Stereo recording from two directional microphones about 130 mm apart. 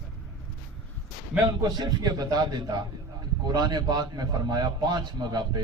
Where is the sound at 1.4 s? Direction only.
30° right (ahead or behind).